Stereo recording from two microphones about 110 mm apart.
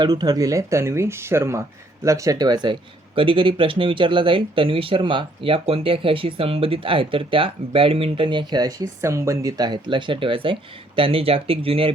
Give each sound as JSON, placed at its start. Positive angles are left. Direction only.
{"t": 0.0, "sound": "speech", "side_deg": -40}
{"t": 3.2, "sound": "speech", "side_deg": -50}